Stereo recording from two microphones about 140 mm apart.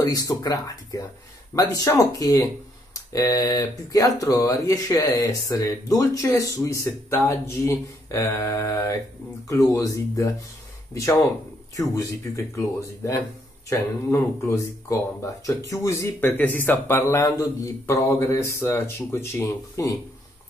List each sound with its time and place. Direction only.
0.0 s speech: 25° left (ahead or behind)
11.7 s speech: 25° left (ahead or behind)